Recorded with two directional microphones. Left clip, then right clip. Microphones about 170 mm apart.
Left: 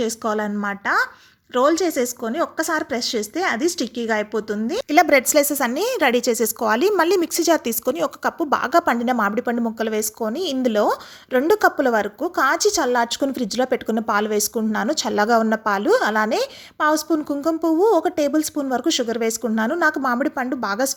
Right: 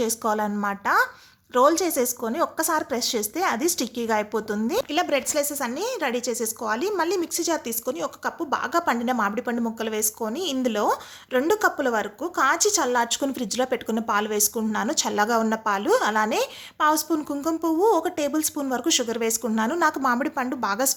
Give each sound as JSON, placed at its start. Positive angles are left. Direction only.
{"t": 0.0, "sound": "a woman's voice", "side_deg": 10}
{"t": 4.9, "sound": "a woman's voice", "side_deg": 35}